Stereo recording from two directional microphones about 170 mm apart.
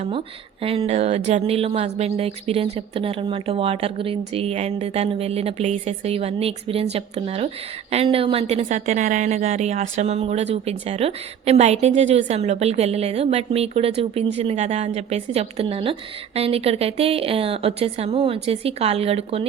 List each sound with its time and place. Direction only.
0.6 s a woman's voice: 35° right (ahead or behind)